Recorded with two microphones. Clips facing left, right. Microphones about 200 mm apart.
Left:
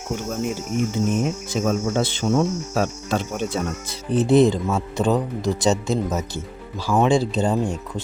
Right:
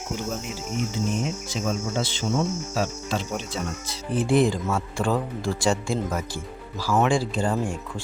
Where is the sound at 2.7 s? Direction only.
55° left (ahead or behind).